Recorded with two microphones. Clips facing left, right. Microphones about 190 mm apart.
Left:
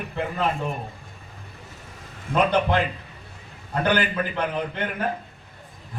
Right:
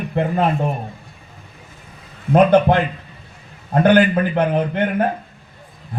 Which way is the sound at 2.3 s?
55° right (ahead or behind).